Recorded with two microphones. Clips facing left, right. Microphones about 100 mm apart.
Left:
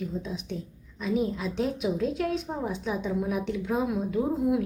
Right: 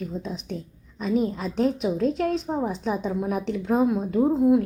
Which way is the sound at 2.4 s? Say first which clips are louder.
Right 5 dB; 35° right (ahead or behind).